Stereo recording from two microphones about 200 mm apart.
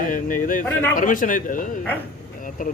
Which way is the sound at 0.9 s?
40° left (ahead or behind).